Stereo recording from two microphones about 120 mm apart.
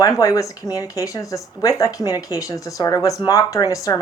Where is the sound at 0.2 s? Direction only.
30° left (ahead or behind).